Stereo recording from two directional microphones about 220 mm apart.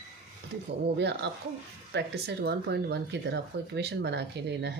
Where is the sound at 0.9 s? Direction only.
50° right (ahead or behind).